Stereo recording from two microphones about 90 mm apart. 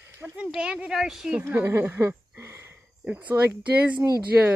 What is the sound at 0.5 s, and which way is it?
Speech, 10° right (ahead or behind).